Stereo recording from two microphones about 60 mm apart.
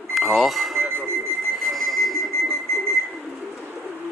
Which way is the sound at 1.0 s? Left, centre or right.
Right.